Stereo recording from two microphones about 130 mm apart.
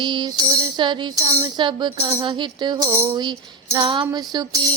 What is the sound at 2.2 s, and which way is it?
Music, 40° right (ahead or behind).